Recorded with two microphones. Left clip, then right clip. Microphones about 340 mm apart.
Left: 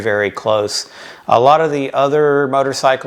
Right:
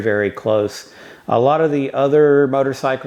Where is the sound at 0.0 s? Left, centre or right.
Left.